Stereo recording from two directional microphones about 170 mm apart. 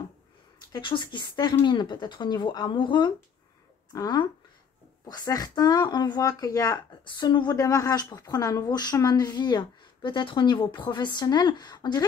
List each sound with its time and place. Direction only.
0.7 s speech: 30° left (ahead or behind)